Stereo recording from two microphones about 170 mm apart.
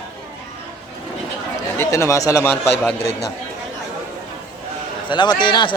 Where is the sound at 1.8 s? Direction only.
15° left (ahead or behind).